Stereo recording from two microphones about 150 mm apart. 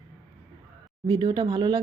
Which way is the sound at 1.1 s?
30° right (ahead or behind).